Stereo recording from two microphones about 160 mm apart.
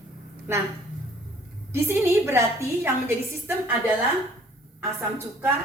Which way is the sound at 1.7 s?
15° right (ahead or behind).